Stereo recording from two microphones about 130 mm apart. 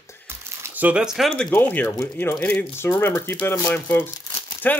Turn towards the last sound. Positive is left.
turn(degrees=15)  # may be behind; listen again after turning